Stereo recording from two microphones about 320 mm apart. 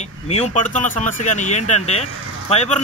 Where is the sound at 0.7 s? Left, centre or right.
Left.